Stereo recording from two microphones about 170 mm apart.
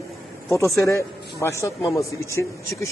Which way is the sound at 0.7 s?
20° left (ahead or behind).